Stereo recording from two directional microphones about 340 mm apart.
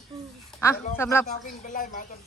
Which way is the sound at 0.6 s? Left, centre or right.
Centre.